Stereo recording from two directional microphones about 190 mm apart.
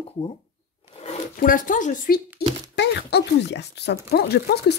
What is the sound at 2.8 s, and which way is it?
Speech, 60° left (ahead or behind).